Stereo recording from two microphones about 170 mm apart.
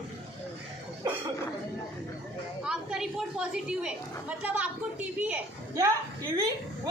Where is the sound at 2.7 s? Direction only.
5° right (ahead or behind).